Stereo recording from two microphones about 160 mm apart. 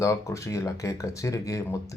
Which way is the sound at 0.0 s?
20° left (ahead or behind).